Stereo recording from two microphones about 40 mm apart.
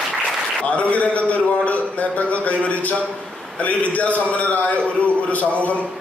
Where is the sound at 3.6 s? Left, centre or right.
Left.